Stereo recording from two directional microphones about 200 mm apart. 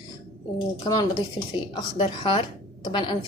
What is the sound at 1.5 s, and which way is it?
A woman's voice, 25° left (ahead or behind).